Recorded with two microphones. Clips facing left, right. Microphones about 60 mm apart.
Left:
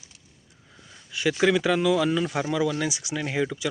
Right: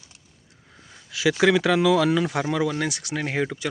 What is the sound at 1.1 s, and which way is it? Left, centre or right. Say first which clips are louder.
Speech: right 3 dB; right.